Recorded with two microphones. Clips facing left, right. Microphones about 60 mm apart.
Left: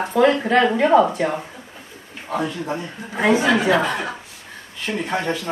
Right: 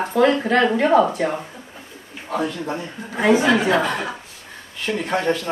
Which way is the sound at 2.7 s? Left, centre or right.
Centre.